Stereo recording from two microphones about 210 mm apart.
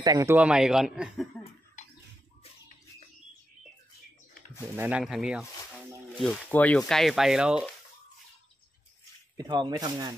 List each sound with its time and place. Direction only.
0.0 s speech: 15° right (ahead or behind)
4.7 s speech: 5° right (ahead or behind)
9.4 s speech: 20° right (ahead or behind)